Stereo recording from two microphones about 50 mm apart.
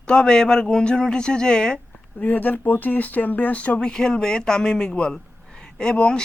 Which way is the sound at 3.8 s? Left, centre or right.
Centre.